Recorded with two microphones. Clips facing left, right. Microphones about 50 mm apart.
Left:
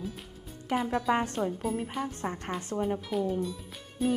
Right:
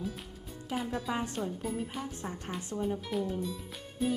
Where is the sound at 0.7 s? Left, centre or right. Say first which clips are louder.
Left 6 dB; left.